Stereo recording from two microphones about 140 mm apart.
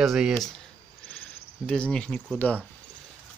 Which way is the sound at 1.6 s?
5° left (ahead or behind).